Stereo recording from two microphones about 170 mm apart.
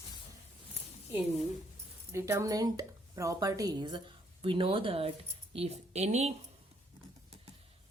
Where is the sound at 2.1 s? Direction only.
15° right (ahead or behind); by 6.3 s 40° right (ahead or behind).